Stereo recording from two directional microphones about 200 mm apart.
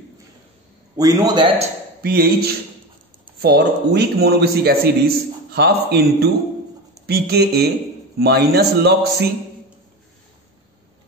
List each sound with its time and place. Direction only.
0.9 s a man's voice: 20° right (ahead or behind)
2.0 s a man's voice: 50° right (ahead or behind)